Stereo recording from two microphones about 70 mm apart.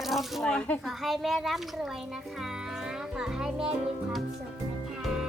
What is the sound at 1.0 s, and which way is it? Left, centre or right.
Speech, centre.